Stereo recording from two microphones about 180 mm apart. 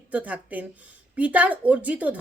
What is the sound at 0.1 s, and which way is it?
A woman's voice, 10° right (ahead or behind).